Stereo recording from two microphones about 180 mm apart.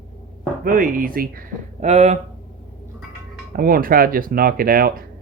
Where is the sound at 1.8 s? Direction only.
40° right (ahead or behind).